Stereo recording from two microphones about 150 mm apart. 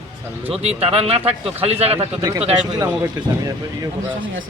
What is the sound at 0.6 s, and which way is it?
Speech, 40° right (ahead or behind).